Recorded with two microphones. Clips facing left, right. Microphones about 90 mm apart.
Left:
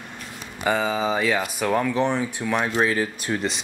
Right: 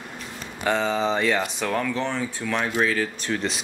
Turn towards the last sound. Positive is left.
turn(degrees=15)  # may be behind; listen again after turning